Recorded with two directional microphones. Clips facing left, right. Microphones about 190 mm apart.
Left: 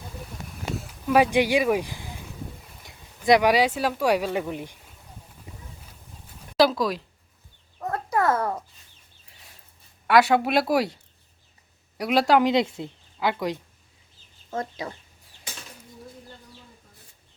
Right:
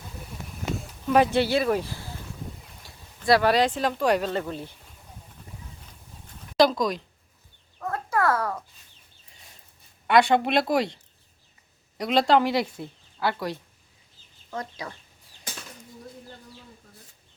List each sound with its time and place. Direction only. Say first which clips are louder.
0.8 s speech: left 1 dB; 5° left (ahead or behind)
5.5 s clip-clop: left 2 dB; 15° left (ahead or behind)
5.8 s a sound: even; 5° left (ahead or behind)
8.1 s a child's voice: left 1 dB; 20° left (ahead or behind)
10.1 s a woman's voice: left 1 dB; 5° left (ahead or behind); by 14.9 s 25° left (ahead or behind)